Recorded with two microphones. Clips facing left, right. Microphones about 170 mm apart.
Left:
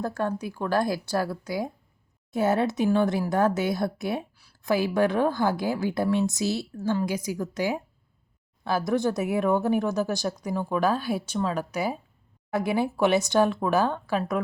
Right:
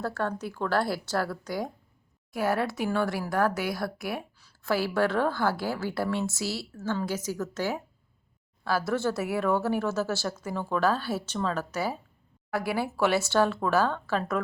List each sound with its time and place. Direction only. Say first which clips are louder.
0.0 s speech: left 2 dB; 15° left (ahead or behind)
2.3 s speech: left 4 dB; 25° left (ahead or behind)